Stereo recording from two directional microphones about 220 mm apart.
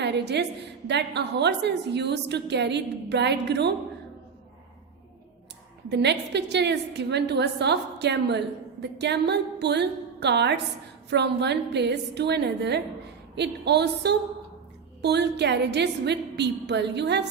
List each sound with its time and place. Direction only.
0.0 s a woman's voice: 50° right (ahead or behind)
5.9 s a woman's voice: 50° right (ahead or behind)